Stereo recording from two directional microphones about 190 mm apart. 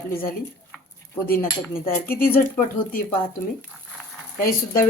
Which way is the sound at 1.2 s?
50° left (ahead or behind).